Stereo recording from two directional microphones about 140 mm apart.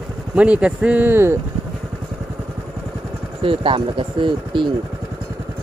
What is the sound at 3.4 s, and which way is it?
Speech, 40° right (ahead or behind).